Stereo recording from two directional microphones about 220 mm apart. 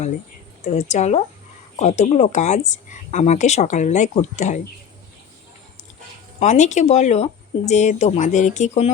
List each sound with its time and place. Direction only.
0.6 s speech: 30° left (ahead or behind)
6.4 s speech: 30° left (ahead or behind)